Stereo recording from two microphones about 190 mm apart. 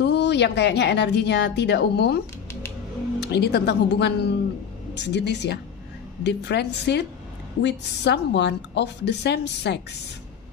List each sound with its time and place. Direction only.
0.0 s speech: 65° left (ahead or behind)